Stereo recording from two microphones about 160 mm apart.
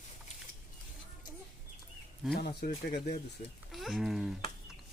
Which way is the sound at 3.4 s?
50° left (ahead or behind).